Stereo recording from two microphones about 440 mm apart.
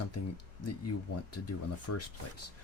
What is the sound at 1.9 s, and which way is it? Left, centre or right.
Speech, left.